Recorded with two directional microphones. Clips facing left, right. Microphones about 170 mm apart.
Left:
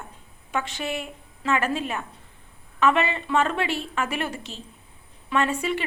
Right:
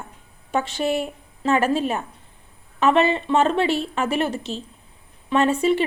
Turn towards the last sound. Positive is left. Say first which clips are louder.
# right 6 dB
turn(degrees=-30)  # may be behind; listen again after turning